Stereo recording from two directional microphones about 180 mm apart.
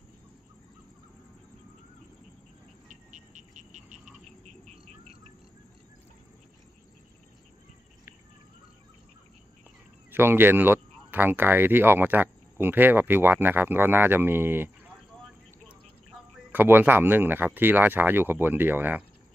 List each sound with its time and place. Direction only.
2.9 s a sound: 45° right (ahead or behind)
10.1 s speech: 10° right (ahead or behind)
16.5 s speech: 10° right (ahead or behind)